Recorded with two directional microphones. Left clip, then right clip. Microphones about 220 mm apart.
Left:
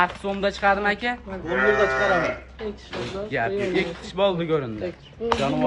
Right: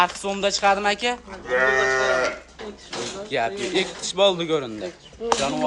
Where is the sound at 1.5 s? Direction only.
40° right (ahead or behind).